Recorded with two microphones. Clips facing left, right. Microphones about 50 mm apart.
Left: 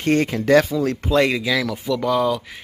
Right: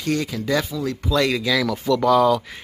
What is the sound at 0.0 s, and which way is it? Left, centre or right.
Speech, left.